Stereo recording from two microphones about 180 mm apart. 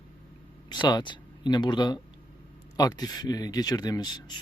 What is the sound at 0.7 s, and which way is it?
Speech, 25° left (ahead or behind).